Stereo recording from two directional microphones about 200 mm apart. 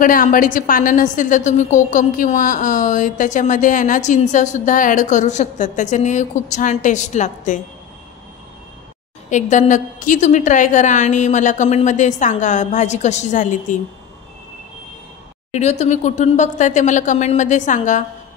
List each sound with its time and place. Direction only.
0.0 s a woman's voice: 40° left (ahead or behind)
9.3 s a woman's voice: 35° left (ahead or behind)
15.5 s a woman's voice: 35° left (ahead or behind)